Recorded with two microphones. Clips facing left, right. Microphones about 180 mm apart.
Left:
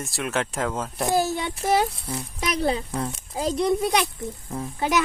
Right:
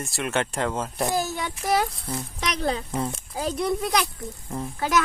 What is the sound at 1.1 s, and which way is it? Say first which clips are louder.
Speech: left 4 dB; 30° left (ahead or behind).